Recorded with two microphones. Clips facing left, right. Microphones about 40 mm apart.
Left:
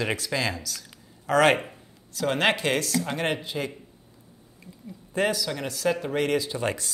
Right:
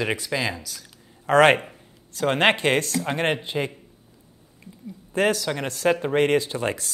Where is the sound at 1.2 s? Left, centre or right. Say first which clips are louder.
Right 4 dB; right.